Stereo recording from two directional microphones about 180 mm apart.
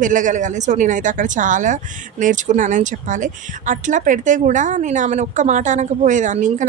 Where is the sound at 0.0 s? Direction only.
45° right (ahead or behind).